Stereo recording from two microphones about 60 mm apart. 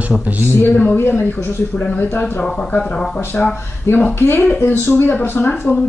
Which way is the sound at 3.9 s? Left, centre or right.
Left.